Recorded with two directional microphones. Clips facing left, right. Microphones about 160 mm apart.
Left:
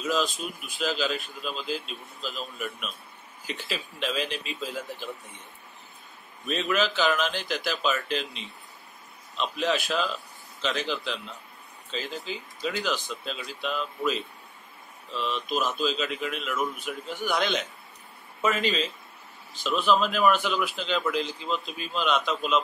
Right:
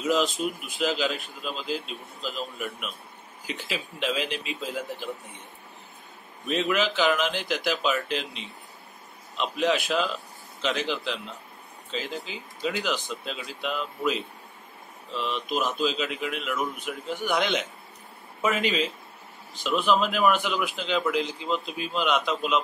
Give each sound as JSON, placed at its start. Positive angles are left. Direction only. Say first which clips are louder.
{"t": 0.0, "sound": "a man's voice", "louder": "right 3 dB", "side_deg": -20}
{"t": 6.5, "sound": "a man's voice", "louder": "right 1 dB", "side_deg": -15}